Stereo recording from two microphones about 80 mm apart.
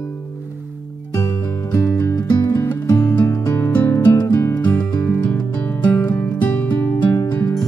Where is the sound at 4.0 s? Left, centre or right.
Left.